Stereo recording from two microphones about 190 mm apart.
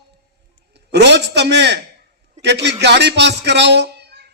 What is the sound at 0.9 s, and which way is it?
A man's voice, 65° right (ahead or behind).